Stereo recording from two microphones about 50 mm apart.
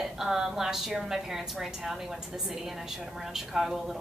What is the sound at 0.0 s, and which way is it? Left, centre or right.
A woman's voice, centre.